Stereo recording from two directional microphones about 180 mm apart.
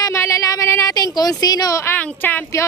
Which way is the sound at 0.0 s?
15° left (ahead or behind).